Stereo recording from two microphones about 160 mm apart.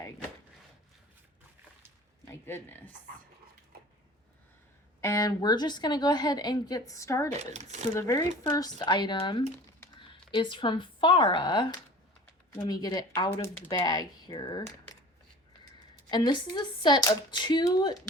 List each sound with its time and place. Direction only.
2.3 s speech: 15° left (ahead or behind)
4.9 s a woman's voice: 20° left (ahead or behind)
7.3 s speech: 45° right (ahead or behind)
7.9 s a woman's voice: 20° left (ahead or behind)
16.0 s a woman's voice: 25° left (ahead or behind)